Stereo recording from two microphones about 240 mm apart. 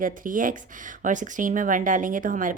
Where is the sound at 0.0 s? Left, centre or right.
Right.